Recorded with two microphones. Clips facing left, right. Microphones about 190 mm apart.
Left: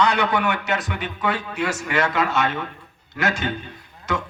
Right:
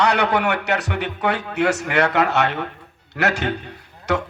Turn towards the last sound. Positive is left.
turn(degrees=-65)  # may be behind; listen again after turning